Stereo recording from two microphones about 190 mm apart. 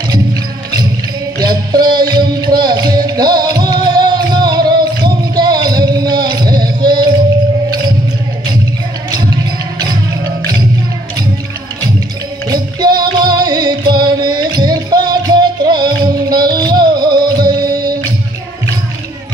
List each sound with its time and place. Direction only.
1.4 s music: 20° right (ahead or behind)
12.8 s music: 20° right (ahead or behind)